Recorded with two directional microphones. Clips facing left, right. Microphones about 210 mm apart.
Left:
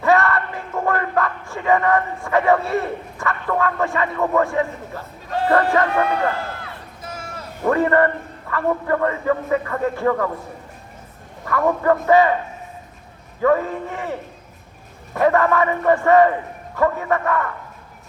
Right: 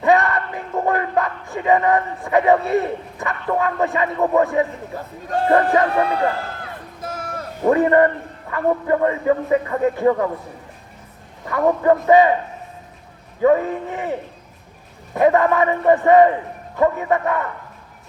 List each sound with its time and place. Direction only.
0.0 s a sound: 20° right (ahead or behind)
5.5 s speech: 15° right (ahead or behind)
5.9 s a man's voice: 35° right (ahead or behind)
7.0 s a sound: 55° right (ahead or behind)
7.6 s a man's voice: 20° right (ahead or behind)
11.4 s a man's voice: 20° right (ahead or behind)
13.4 s a man's voice: 20° right (ahead or behind)